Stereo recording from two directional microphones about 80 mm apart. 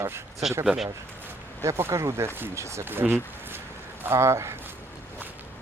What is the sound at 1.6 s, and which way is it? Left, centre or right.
Speech, right.